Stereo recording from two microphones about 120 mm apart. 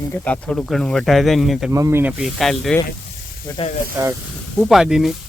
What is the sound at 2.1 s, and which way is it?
Speech, 5° right (ahead or behind).